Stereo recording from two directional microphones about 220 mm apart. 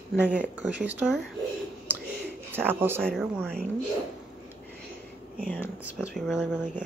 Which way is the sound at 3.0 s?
Centre (ahead or behind).